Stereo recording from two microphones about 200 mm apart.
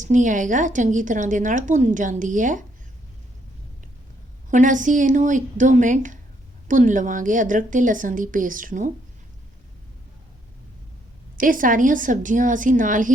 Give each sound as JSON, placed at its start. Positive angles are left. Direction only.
{"t": 0.0, "sound": "a woman's voice", "side_deg": -40}
{"t": 4.5, "sound": "a woman's voice", "side_deg": -40}
{"t": 11.3, "sound": "a woman's voice", "side_deg": -45}